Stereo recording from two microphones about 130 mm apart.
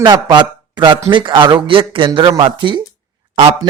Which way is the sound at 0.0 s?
35° right (ahead or behind).